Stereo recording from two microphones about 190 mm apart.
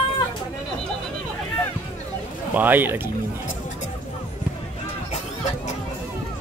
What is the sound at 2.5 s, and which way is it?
Speech, 10° right (ahead or behind).